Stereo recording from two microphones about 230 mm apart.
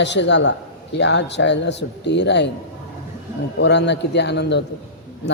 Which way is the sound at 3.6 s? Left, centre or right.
Left.